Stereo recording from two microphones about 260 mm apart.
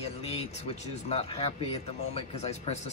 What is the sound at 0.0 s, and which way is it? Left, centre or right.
Speech, left.